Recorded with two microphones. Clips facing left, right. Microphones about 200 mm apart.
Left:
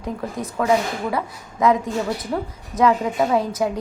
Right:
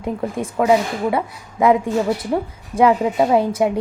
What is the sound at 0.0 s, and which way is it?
A woman's voice, 25° right (ahead or behind).